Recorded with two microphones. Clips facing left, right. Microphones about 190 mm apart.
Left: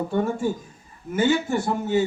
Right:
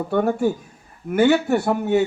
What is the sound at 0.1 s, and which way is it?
Speech, 65° right (ahead or behind).